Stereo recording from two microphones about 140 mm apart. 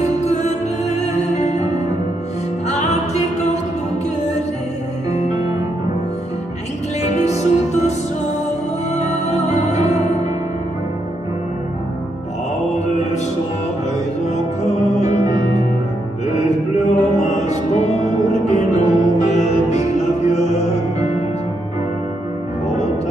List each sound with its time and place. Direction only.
0.0 s music: 55° left (ahead or behind)
7.2 s music: 55° left (ahead or behind)
8.9 s music: 55° left (ahead or behind)
14.3 s music: 55° left (ahead or behind)
16.3 s music: 50° left (ahead or behind)